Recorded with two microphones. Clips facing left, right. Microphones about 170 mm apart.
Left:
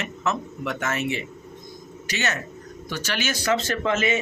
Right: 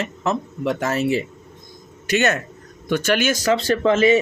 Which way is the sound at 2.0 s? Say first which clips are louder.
Right 9 dB; 55° right (ahead or behind).